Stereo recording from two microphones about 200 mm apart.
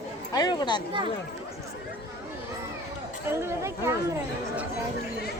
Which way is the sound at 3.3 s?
15° right (ahead or behind).